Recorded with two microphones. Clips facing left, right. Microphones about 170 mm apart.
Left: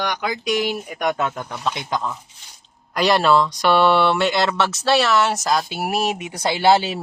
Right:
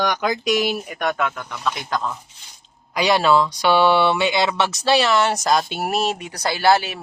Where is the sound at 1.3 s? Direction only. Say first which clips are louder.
Left 3 dB; 40° left (ahead or behind).